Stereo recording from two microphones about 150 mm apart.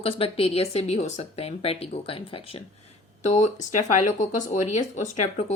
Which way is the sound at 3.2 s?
50° left (ahead or behind).